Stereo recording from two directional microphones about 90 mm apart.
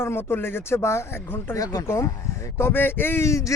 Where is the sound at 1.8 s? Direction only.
30° left (ahead or behind).